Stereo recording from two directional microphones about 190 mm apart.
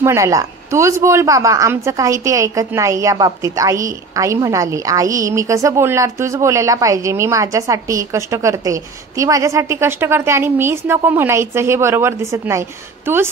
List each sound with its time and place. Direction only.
0.0 s speech: 15° right (ahead or behind)